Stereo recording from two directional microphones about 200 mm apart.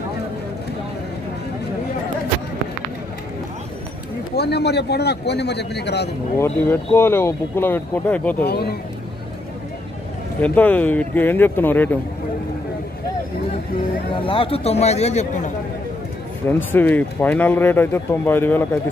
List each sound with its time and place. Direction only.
4.4 s a man's voice: 55° left (ahead or behind)
6.3 s speech: 10° left (ahead or behind)
8.5 s speech: 55° left (ahead or behind)
10.4 s speech: 10° left (ahead or behind)
14.1 s speech: 25° left (ahead or behind)
16.4 s speech: 10° left (ahead or behind)